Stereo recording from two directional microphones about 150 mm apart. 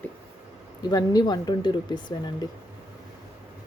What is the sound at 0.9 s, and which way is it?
Speech, 25° left (ahead or behind).